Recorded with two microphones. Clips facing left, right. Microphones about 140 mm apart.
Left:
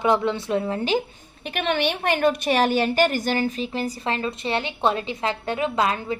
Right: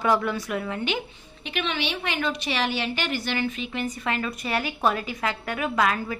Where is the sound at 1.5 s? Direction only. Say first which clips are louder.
Left 5 dB; 50° left (ahead or behind).